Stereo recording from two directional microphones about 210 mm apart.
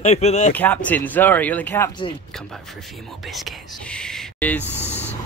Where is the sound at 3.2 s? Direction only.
Centre (ahead or behind).